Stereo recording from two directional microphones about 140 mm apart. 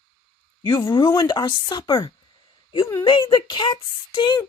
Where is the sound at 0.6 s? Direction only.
35° left (ahead or behind).